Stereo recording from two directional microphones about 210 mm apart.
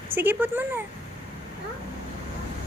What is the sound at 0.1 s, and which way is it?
Speech, 10° right (ahead or behind).